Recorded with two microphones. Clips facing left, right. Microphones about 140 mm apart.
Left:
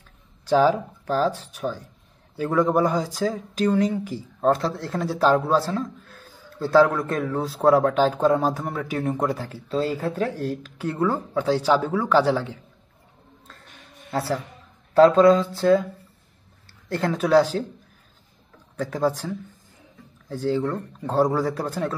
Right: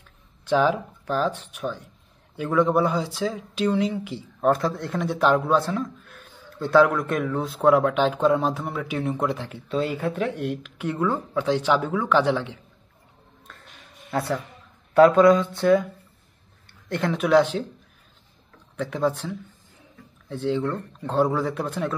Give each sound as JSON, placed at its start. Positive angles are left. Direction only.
{"t": 0.5, "sound": "speech", "side_deg": 35}
{"t": 4.4, "sound": "speech", "side_deg": 25}
{"t": 5.7, "sound": "a sound", "side_deg": 30}
{"t": 6.7, "sound": "speech", "side_deg": 30}
{"t": 14.1, "sound": "speech", "side_deg": 30}
{"t": 17.0, "sound": "speech", "side_deg": 35}
{"t": 18.8, "sound": "speech", "side_deg": 35}